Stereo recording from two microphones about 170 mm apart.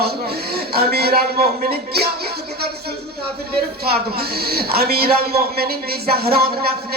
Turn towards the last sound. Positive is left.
turn(degrees=-65)  # may be behind; listen again after turning